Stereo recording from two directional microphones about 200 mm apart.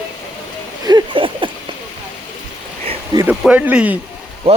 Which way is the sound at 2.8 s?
20° right (ahead or behind).